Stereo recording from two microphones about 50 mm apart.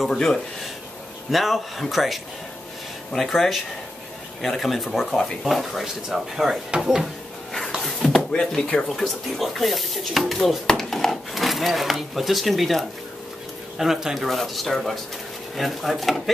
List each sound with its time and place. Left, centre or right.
1.3 s speech: centre
7.8 s door: centre
8.2 s drawer open or close: left
8.5 s speech: centre
8.8 s speech: centre
13.7 s speech: centre